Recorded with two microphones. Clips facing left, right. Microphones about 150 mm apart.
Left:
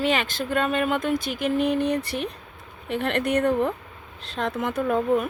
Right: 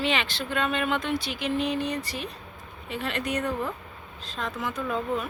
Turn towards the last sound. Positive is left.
turn(degrees=55)  # may be behind; listen again after turning